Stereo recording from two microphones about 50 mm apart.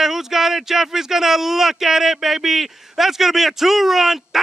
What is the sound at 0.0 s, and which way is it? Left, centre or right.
Speech, centre.